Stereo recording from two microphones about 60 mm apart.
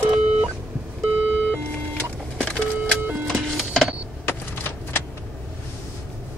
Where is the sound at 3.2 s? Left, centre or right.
Centre.